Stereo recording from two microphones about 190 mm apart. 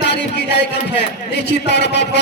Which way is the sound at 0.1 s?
65° left (ahead or behind).